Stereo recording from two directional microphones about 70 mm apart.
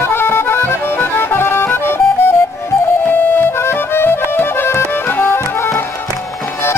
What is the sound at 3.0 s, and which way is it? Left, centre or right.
Music, left.